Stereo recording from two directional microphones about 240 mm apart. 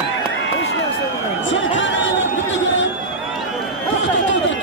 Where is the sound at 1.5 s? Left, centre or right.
Left.